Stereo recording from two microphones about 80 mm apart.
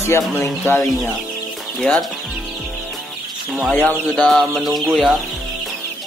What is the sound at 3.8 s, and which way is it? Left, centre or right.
Chicken, centre.